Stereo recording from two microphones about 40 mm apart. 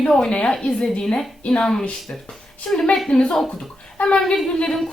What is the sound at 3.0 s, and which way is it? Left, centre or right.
Speech, centre.